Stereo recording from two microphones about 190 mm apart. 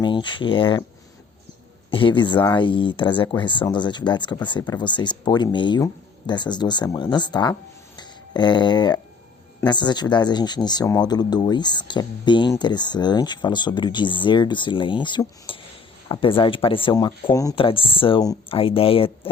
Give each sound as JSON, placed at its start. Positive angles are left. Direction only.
{"t": 0.0, "sound": "speech", "side_deg": 25}
{"t": 1.9, "sound": "speech", "side_deg": 25}